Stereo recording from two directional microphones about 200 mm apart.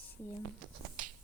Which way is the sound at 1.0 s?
45° right (ahead or behind).